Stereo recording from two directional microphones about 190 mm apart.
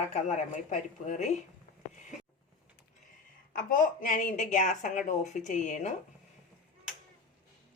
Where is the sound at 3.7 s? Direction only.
45° left (ahead or behind).